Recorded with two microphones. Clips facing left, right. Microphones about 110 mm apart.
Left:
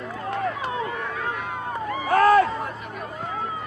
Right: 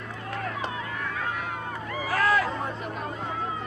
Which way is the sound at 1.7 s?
25° left (ahead or behind).